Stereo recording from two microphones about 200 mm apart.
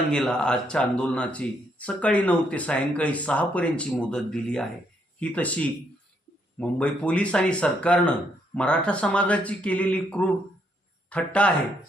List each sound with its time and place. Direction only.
0.1 s speech: 5° left (ahead or behind)